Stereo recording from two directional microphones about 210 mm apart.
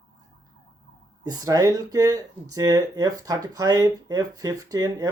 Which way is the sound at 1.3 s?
15° right (ahead or behind).